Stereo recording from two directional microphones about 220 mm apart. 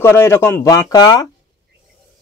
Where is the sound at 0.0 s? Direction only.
10° left (ahead or behind).